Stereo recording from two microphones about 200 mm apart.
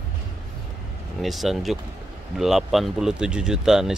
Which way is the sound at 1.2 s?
Centre (ahead or behind).